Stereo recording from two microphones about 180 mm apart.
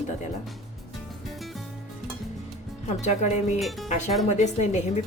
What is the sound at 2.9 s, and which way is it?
Speech, 40° left (ahead or behind).